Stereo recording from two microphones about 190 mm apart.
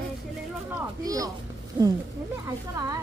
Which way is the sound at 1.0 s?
20° right (ahead or behind).